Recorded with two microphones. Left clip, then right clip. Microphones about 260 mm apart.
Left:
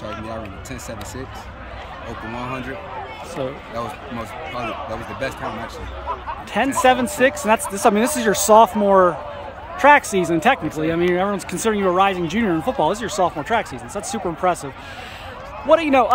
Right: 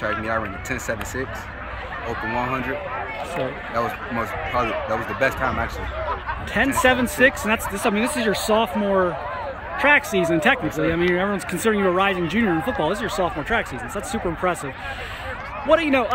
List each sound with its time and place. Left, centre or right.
6.5 s speech: centre
15.7 s speech: centre